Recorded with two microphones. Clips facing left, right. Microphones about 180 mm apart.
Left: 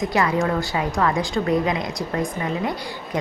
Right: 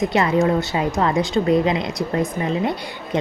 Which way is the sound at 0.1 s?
25° right (ahead or behind).